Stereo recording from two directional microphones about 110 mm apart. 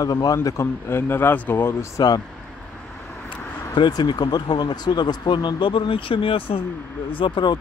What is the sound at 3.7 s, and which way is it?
Speech, 45° left (ahead or behind).